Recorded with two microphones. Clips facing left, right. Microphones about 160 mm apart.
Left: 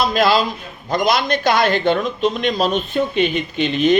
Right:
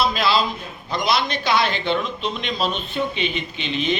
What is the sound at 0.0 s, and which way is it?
Speech, 45° left (ahead or behind).